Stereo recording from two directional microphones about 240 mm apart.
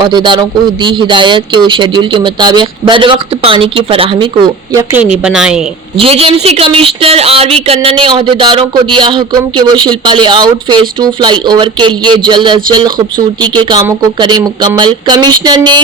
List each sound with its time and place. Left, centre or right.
0.0 s speech: centre
4.7 s a woman's voice: centre
6.0 s speech: right
13.6 s speech: centre